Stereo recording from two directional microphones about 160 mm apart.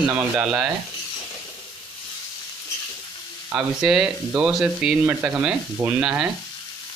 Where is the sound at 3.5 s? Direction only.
5° right (ahead or behind).